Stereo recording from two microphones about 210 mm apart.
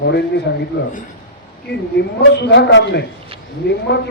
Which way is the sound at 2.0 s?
55° left (ahead or behind).